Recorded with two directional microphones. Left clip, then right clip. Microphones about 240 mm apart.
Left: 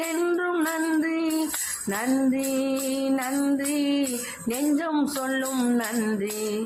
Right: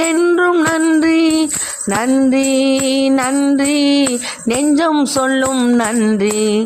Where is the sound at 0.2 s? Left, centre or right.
Right.